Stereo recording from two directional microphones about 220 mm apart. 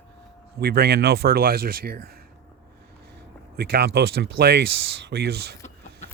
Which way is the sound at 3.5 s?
45° right (ahead or behind).